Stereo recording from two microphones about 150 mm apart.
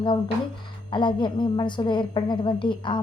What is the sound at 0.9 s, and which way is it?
A woman's voice, 30° left (ahead or behind).